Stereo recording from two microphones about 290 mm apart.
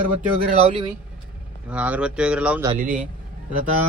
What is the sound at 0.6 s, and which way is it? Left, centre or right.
Speech, centre.